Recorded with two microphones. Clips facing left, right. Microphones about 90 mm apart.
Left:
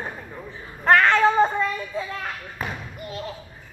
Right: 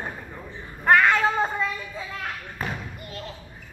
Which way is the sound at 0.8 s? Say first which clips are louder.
Left 2 dB; 10° right (ahead or behind).